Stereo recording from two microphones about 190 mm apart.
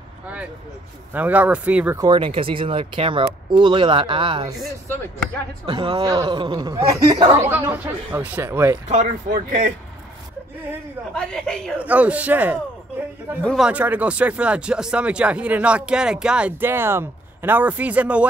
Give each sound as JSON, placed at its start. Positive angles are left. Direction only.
{"t": 1.1, "sound": "speech", "side_deg": -10}
{"t": 2.0, "sound": "speech", "side_deg": -25}
{"t": 5.7, "sound": "speech", "side_deg": -25}
{"t": 7.5, "sound": "speech", "side_deg": -10}
{"t": 8.8, "sound": "speech", "side_deg": -35}
{"t": 11.1, "sound": "a woman's voice", "side_deg": 5}
{"t": 11.8, "sound": "speech", "side_deg": -5}
{"t": 13.4, "sound": "a woman's voice", "side_deg": 5}
{"t": 13.7, "sound": "speech", "side_deg": -10}